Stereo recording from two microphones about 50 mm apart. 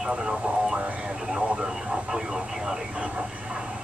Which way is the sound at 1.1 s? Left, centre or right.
Centre.